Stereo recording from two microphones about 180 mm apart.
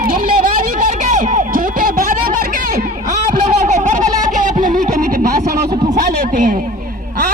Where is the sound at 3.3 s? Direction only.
45° right (ahead or behind).